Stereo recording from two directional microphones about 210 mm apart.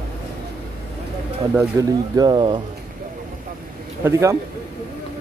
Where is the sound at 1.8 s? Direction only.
20° right (ahead or behind).